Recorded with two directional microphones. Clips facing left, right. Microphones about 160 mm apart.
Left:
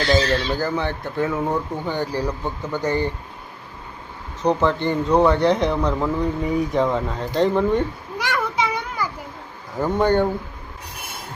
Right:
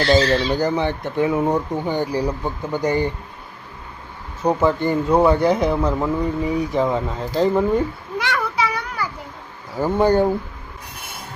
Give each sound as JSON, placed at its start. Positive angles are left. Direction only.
{"t": 0.0, "sound": "speech", "side_deg": -10}
{"t": 4.4, "sound": "speech", "side_deg": -10}
{"t": 8.2, "sound": "a sound", "side_deg": 15}
{"t": 9.7, "sound": "speech", "side_deg": -5}